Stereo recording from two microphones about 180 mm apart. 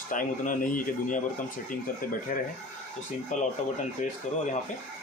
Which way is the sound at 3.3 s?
40° left (ahead or behind).